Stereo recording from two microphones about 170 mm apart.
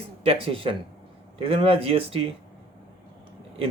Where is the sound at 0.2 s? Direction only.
35° right (ahead or behind).